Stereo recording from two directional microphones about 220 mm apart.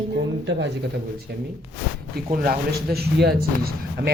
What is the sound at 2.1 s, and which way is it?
A man's voice, 40° right (ahead or behind).